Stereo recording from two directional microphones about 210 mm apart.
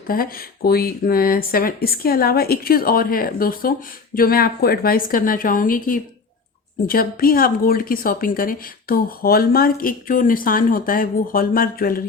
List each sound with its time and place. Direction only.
0.1 s speech: 45° left (ahead or behind)